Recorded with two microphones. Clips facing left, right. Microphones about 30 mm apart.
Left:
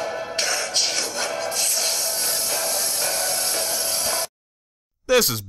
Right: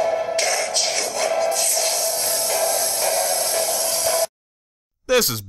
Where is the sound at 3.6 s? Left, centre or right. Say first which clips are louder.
Right 4 dB; centre.